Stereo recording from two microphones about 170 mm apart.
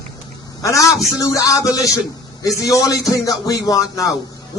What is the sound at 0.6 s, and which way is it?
Speech, 20° left (ahead or behind).